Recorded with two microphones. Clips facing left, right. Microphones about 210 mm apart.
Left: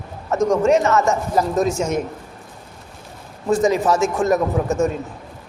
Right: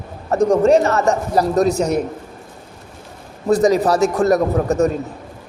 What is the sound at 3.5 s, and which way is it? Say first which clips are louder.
A man's voice: right 3 dB; 35° right (ahead or behind).